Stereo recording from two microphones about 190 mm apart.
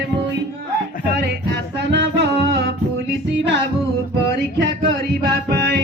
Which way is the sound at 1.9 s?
60° right (ahead or behind).